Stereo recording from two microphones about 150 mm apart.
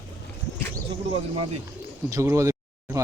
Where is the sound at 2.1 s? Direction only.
20° right (ahead or behind).